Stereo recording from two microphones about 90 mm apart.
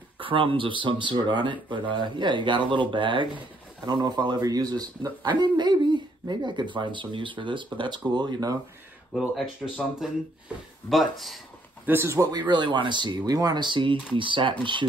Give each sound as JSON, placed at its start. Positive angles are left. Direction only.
{"t": 0.2, "sound": "speech", "side_deg": -75}
{"t": 3.8, "sound": "speech", "side_deg": -50}
{"t": 9.6, "sound": "speech", "side_deg": 10}
{"t": 10.9, "sound": "speech", "side_deg": 0}
{"t": 11.8, "sound": "speech", "side_deg": -25}
{"t": 12.2, "sound": "speech", "side_deg": -50}